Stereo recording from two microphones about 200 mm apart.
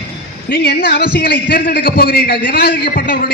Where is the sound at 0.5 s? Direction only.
50° left (ahead or behind).